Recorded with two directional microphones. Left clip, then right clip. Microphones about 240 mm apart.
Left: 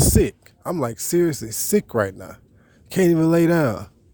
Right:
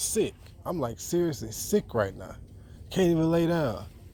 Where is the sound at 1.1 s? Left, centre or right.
Left.